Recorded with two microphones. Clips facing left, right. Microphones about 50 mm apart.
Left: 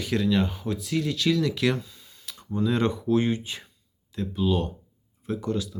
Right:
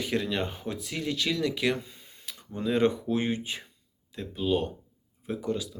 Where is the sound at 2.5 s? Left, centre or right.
Right.